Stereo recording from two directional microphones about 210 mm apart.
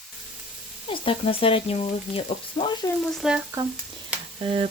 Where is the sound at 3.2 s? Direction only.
Centre (ahead or behind).